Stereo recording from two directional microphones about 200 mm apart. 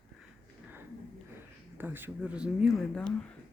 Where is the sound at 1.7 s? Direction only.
10° right (ahead or behind).